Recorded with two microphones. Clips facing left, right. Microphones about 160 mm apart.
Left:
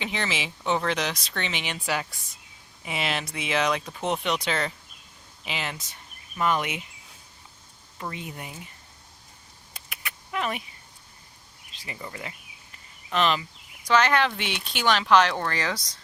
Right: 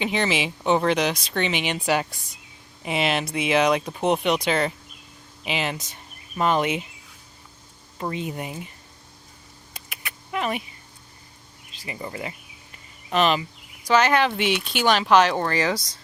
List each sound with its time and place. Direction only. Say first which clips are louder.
0.0 s speech: right 7 dB; 15° right (ahead or behind)
2.9 s speech: right 6 dB; 20° right (ahead or behind)
7.9 s speech: right 7 dB; 25° right (ahead or behind)
9.7 s a sound: right 1 dB; 5° right (ahead or behind)
11.9 s speech: right 6 dB; 20° right (ahead or behind)